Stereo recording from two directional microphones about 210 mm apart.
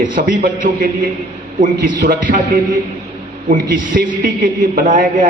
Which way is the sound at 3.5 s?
40° right (ahead or behind).